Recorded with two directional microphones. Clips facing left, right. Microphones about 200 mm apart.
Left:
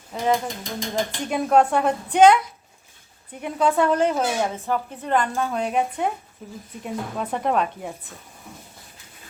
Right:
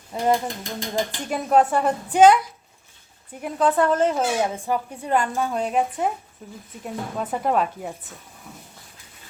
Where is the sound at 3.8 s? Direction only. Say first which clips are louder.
Even; centre (ahead or behind).